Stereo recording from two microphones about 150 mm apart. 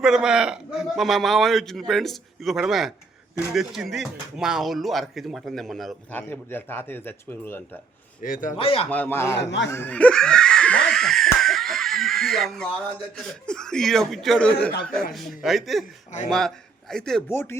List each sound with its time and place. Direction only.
0.0 s a man's voice: 5° right (ahead or behind)
6.1 s speech: 10° left (ahead or behind)
8.2 s a man's voice: 65° left (ahead or behind)
8.5 s speech: 40° left (ahead or behind)
8.9 s laughter: 10° left (ahead or behind)
13.1 s a man's voice: 5° left (ahead or behind)
16.9 s a man's voice: 5° left (ahead or behind)
17.2 s speech: 15° left (ahead or behind)